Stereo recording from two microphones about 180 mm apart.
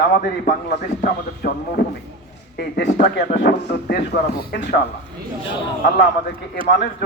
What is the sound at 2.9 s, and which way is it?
Speech, 45° left (ahead or behind).